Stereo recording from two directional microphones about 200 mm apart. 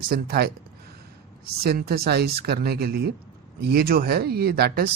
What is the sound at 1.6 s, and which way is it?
Speech, 50° right (ahead or behind).